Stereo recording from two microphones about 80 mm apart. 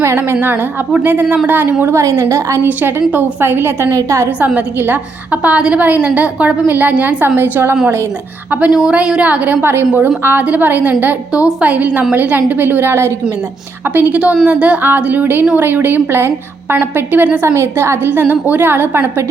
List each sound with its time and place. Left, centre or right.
0.0 s a woman's voice: right
1.0 s a woman's voice: right
1.8 s a woman's voice: right
2.6 s a woman's voice: right
8.6 s a woman's voice: centre; by 13.1 s right
14.1 s a woman's voice: centre
17.5 s a woman's voice: right